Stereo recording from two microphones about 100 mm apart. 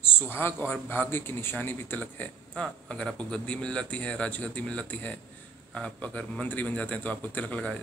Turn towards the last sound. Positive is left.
turn(degrees=15)  # may be behind; listen again after turning